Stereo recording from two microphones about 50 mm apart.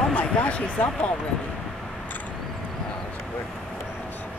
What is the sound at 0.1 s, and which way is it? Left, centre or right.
Speech, left.